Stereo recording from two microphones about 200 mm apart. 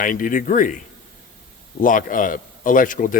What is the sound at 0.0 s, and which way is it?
Speech, 40° left (ahead or behind).